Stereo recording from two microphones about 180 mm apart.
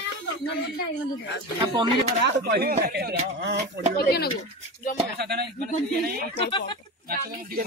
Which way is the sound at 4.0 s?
65° left (ahead or behind).